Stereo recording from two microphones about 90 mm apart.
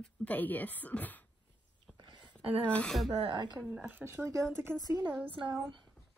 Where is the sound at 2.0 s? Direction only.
60° right (ahead or behind).